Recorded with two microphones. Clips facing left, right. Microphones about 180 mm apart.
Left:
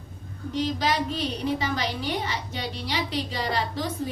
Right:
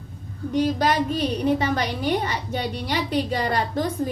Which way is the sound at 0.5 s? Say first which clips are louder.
Right 5 dB; 50° right (ahead or behind).